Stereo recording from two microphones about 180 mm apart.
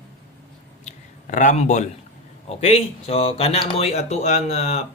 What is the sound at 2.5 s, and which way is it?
Speech, 35° left (ahead or behind).